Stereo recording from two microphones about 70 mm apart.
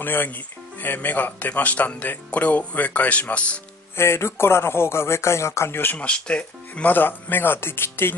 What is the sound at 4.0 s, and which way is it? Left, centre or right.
Speech, left.